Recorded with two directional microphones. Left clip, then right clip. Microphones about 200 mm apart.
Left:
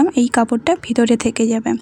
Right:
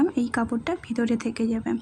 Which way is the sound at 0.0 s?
30° left (ahead or behind).